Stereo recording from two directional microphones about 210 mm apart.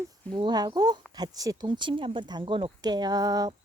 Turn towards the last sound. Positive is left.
turn(degrees=-20)  # may be behind; listen again after turning